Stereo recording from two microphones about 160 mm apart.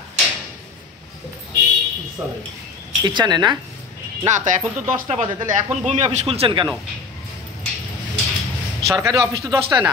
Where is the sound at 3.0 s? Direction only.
30° right (ahead or behind).